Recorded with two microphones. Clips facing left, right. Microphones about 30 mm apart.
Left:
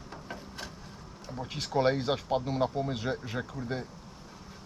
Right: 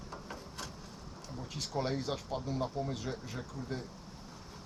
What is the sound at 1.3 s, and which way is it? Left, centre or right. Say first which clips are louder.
Speech: left 7 dB; left.